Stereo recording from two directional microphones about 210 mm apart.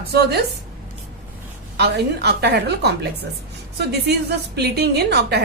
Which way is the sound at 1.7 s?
50° right (ahead or behind).